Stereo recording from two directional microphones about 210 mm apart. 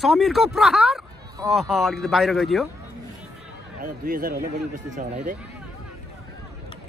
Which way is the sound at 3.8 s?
45° right (ahead or behind).